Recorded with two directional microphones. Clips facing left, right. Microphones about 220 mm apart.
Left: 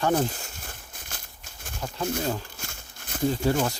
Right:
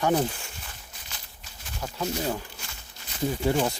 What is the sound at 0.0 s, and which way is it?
Speech, 15° right (ahead or behind).